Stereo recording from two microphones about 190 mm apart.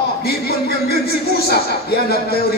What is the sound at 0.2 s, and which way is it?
A man's voice, 55° left (ahead or behind).